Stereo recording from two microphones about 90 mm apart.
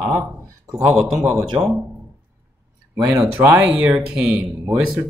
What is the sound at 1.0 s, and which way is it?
Speech, 10° right (ahead or behind).